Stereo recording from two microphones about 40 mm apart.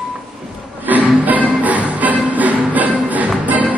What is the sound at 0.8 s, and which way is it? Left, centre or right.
Music, right.